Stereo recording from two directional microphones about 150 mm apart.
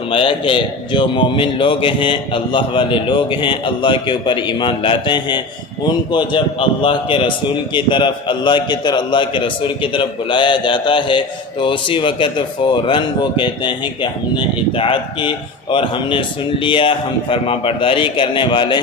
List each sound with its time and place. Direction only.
0.1 s a man's voice: 35° left (ahead or behind)